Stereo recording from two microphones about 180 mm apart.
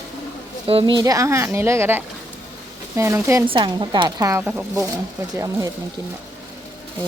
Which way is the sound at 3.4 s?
25° right (ahead or behind).